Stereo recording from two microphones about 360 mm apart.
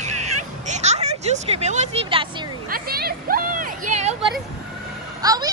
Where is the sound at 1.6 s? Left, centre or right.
Centre.